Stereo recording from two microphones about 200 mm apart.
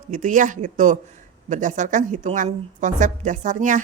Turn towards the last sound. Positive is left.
turn(degrees=-40)  # may be behind; listen again after turning